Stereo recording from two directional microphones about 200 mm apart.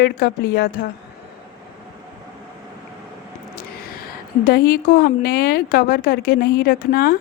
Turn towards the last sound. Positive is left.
turn(degrees=50)  # may be behind; listen again after turning